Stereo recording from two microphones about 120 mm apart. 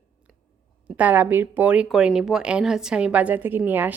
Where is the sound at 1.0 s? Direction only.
15° right (ahead or behind).